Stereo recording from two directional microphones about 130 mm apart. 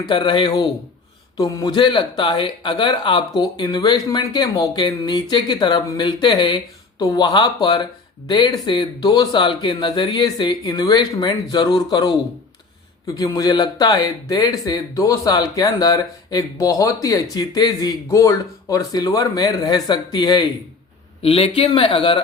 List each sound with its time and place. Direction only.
0.0 s speech: 35° left (ahead or behind)
21.2 s a man's voice: 50° left (ahead or behind)